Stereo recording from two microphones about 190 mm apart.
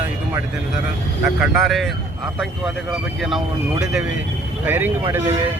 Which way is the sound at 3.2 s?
Centre (ahead or behind).